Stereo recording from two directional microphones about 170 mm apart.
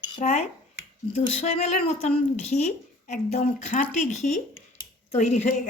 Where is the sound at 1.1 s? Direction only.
35° left (ahead or behind).